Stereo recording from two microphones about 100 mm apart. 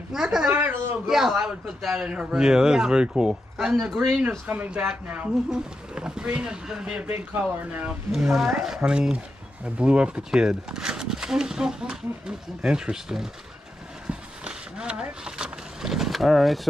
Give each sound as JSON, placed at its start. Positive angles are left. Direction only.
{"t": 0.1, "sound": "a man's voice", "side_deg": -5}
{"t": 0.6, "sound": "speech", "side_deg": -20}
{"t": 1.0, "sound": "a man's voice", "side_deg": -5}
{"t": 4.5, "sound": "speech", "side_deg": -15}
{"t": 7.1, "sound": "speech", "side_deg": -20}
{"t": 8.1, "sound": "speech", "side_deg": -5}
{"t": 14.0, "sound": "vehicle", "side_deg": -10}